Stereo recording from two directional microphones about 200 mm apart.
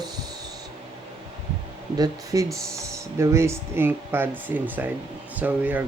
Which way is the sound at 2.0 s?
15° right (ahead or behind).